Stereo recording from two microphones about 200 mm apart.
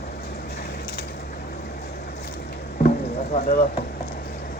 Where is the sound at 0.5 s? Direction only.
50° left (ahead or behind).